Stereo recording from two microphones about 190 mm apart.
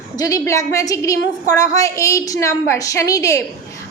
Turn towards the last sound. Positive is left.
turn(degrees=15)  # may be behind; listen again after turning